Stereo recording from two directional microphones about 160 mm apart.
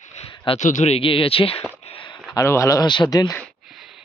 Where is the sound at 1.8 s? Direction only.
35° left (ahead or behind).